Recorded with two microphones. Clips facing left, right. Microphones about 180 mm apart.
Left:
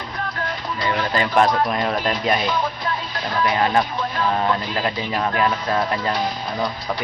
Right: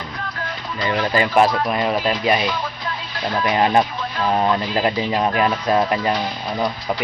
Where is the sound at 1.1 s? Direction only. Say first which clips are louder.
Right 2 dB; 10° right (ahead or behind).